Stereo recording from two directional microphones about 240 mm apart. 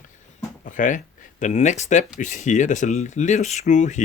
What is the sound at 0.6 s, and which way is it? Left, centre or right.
Speech, left.